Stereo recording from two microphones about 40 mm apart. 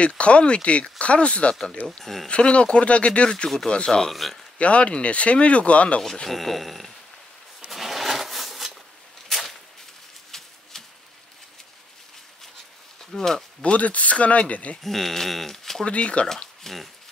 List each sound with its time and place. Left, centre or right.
0.0 s speech: left
1.5 s speech: centre
2.0 s speech: centre
2.2 s speech: left
4.1 s speech: centre
4.6 s speech: left
6.2 s speech: centre
7.7 s a sound: centre
10.3 s a sound: centre
13.1 s speech: centre
13.6 s speech: left
14.8 s speech: centre
15.8 s speech: left
16.6 s speech: centre